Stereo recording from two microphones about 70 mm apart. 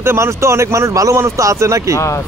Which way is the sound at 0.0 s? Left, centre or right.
Right.